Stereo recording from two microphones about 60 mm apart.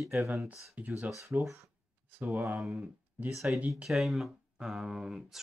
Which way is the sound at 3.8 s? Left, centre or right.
Centre.